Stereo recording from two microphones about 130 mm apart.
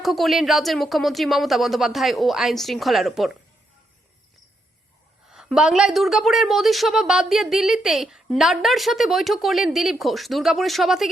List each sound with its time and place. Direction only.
0.0 s a woman's voice: centre (ahead or behind)
5.3 s a woman's voice: 5° right (ahead or behind)